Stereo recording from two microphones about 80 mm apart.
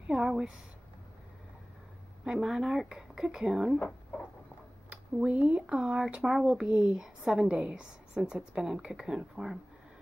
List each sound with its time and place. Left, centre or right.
0.0 s speech: centre
2.2 s speech: centre
4.8 s a sound: centre
5.6 s speech: centre